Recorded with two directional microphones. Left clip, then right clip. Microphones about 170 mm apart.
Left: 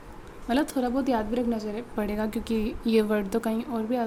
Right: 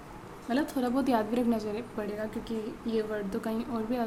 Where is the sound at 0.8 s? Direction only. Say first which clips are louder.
Left 2 dB; 15° left (ahead or behind).